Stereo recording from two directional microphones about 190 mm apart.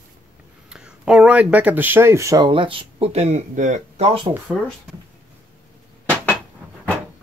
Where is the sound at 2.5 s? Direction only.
25° right (ahead or behind).